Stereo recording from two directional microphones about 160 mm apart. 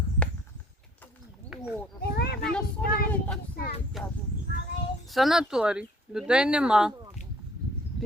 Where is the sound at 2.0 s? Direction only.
85° left.